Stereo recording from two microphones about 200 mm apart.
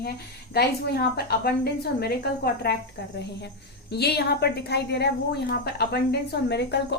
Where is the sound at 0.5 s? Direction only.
55° left (ahead or behind).